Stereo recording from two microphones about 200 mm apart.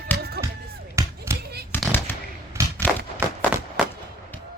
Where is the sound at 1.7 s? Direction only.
10° left (ahead or behind).